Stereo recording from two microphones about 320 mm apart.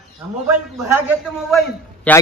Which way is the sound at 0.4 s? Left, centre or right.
Centre.